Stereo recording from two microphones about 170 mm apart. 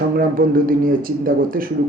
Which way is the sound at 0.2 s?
55° right (ahead or behind).